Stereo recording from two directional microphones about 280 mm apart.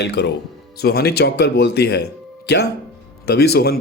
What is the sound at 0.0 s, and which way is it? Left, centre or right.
Speech, left.